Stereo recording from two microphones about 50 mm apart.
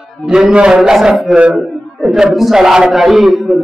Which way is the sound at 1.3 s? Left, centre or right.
Right.